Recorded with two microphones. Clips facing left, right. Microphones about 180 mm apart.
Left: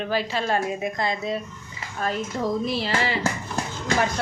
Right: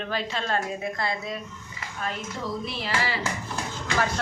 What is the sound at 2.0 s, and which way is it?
Speech, 40° left (ahead or behind).